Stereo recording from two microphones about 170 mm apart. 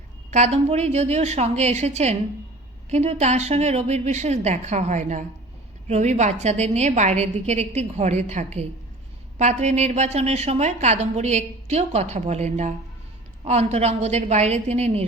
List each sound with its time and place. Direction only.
0.3 s a woman's voice: 40° right (ahead or behind)